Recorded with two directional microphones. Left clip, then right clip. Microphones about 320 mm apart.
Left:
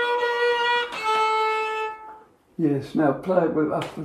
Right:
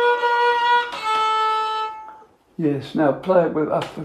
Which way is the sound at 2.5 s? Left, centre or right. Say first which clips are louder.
Right 2 dB; centre.